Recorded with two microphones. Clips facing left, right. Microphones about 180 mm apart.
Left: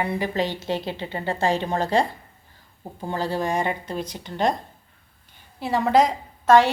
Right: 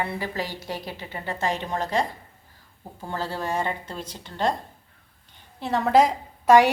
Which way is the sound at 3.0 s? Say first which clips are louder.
Left 4 dB; 15° left (ahead or behind).